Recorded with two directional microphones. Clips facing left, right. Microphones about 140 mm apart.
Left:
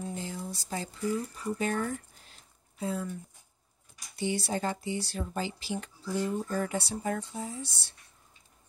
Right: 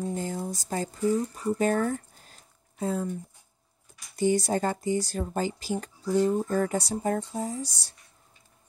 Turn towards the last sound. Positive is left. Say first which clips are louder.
# right 6 dB
turn(degrees=-40)  # may be behind; listen again after turning